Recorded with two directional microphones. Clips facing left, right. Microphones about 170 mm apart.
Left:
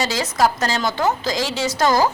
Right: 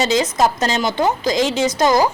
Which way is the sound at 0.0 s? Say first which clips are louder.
Right 3 dB; 20° right (ahead or behind).